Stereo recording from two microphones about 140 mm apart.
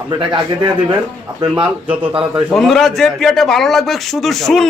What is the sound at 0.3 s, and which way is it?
Speech, 35° right (ahead or behind).